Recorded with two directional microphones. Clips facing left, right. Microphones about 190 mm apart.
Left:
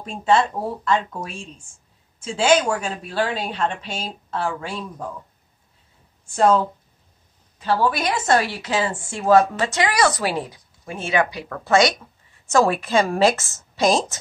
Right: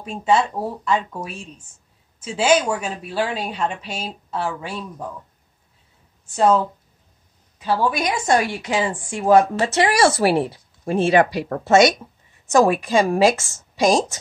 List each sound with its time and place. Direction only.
0.0 s a woman's voice: 10° right (ahead or behind)
1.6 s a sound: 10° left (ahead or behind)
2.2 s a woman's voice: 10° right (ahead or behind)
6.3 s a woman's voice: 5° right (ahead or behind)